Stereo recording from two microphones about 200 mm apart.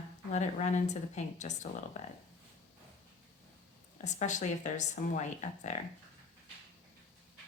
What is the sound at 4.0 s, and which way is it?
Speech, 35° left (ahead or behind).